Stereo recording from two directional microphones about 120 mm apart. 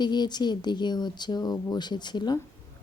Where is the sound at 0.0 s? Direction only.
35° left (ahead or behind).